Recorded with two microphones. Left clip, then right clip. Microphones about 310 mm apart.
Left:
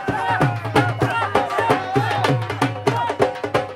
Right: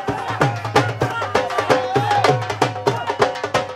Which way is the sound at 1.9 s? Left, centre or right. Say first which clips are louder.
Right 3 dB; centre.